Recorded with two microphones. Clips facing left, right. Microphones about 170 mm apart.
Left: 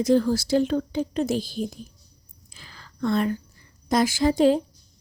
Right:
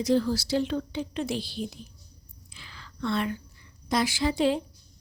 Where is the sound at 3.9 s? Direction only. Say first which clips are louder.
Left 5 dB; 45° left (ahead or behind).